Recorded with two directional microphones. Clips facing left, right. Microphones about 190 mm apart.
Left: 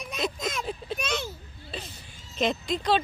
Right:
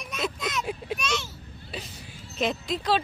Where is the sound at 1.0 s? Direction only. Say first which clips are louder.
Even; 55° left (ahead or behind).